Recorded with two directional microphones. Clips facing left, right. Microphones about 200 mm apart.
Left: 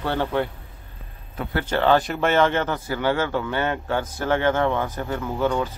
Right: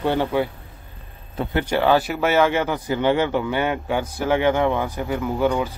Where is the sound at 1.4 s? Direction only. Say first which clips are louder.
Right 4 dB; 30° right (ahead or behind).